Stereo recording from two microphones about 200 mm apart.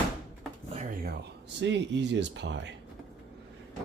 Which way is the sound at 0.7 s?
35° right (ahead or behind).